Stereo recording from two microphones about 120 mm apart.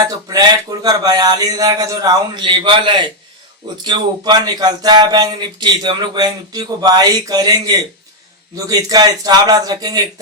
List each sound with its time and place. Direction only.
0.0 s speech: 30° right (ahead or behind)